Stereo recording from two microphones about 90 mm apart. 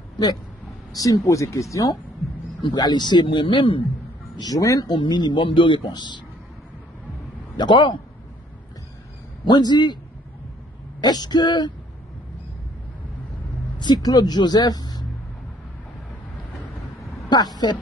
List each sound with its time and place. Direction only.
0.9 s speech: 40° left (ahead or behind)
2.6 s a man's voice: 50° left (ahead or behind); by 3.8 s 70° left (ahead or behind)
4.4 s speech: 40° left (ahead or behind)
4.9 s a man's voice: 60° left (ahead or behind)
7.5 s a man's voice: 55° left (ahead or behind)
9.4 s speech: 50° left (ahead or behind)
11.0 s speech: 50° left (ahead or behind)
13.7 s speech: 50° left (ahead or behind)
17.3 s a woman's voice: 50° left (ahead or behind)